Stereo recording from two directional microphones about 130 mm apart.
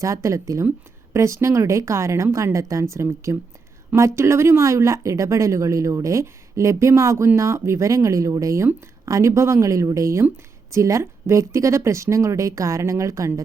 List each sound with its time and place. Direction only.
0.0 s speech: 25° right (ahead or behind)